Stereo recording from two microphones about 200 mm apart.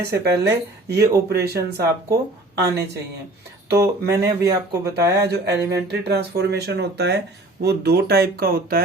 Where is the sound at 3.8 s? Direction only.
15° right (ahead or behind).